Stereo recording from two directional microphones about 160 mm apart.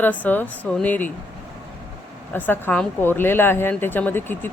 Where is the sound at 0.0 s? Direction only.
10° left (ahead or behind).